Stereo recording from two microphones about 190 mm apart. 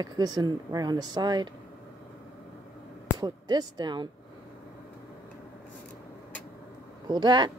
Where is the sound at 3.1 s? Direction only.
20° right (ahead or behind).